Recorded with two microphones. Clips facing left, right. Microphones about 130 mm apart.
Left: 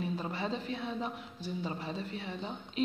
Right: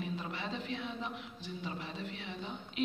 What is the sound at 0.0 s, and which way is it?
Speech, 35° left (ahead or behind).